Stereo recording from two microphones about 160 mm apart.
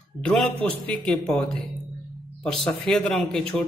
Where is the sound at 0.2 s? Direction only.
5° left (ahead or behind).